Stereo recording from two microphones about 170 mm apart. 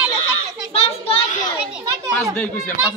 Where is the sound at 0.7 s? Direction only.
35° left (ahead or behind).